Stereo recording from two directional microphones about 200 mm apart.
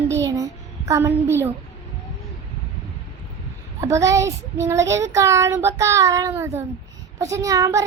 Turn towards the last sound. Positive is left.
turn(degrees=-15)  # may be behind; listen again after turning